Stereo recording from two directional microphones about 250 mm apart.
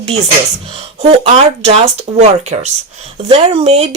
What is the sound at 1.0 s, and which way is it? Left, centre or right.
Speech, right.